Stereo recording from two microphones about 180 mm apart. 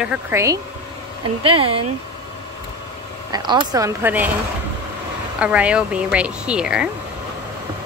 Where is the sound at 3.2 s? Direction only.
25° right (ahead or behind).